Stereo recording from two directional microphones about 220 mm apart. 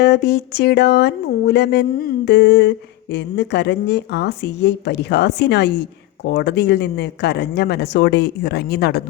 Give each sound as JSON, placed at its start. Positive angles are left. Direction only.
{"t": 0.0, "sound": "speech", "side_deg": 50}